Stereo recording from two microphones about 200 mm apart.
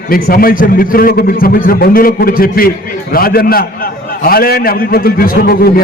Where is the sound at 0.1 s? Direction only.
45° left (ahead or behind).